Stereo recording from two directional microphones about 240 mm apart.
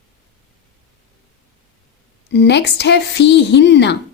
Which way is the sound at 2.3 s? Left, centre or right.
Left.